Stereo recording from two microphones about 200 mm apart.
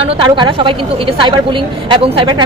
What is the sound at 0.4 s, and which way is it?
A woman's voice, 25° right (ahead or behind).